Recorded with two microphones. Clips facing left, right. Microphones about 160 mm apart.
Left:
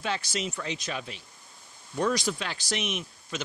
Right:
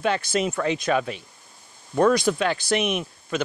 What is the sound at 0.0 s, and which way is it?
Speech, 55° right (ahead or behind).